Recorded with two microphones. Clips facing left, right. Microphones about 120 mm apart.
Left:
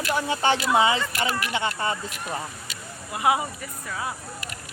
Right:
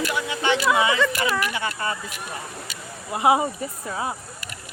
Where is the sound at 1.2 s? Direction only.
25° left (ahead or behind).